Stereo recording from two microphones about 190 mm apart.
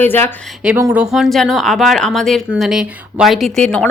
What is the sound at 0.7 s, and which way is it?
Speech, 10° right (ahead or behind).